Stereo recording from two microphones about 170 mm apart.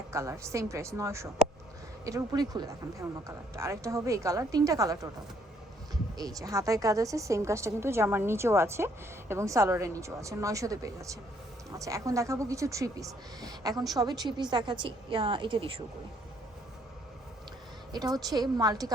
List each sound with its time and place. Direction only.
0.1 s a woman's voice: 15° right (ahead or behind)
6.1 s a woman's voice: 20° right (ahead or behind)
17.9 s speech: 20° right (ahead or behind)